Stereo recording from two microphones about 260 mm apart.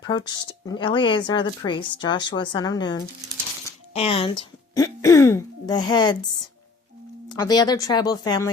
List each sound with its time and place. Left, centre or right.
0.0 s speech: centre
7.3 s speech: centre